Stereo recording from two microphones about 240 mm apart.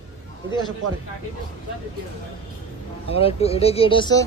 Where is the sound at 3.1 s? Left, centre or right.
Left.